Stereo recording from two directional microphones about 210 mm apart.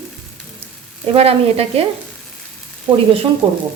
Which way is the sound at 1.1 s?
30° right (ahead or behind).